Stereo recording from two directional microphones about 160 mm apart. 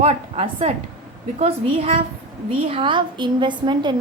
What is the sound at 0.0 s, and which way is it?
A woman's voice, 40° right (ahead or behind).